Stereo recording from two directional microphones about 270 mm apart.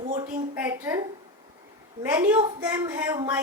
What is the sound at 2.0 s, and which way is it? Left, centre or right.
A woman's voice, centre.